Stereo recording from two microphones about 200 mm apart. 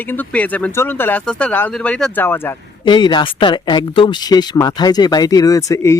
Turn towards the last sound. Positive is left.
turn(degrees=15)  # may be behind; listen again after turning